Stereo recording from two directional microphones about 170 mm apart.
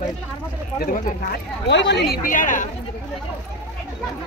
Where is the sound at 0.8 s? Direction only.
60° left (ahead or behind); by 2.0 s 90° left.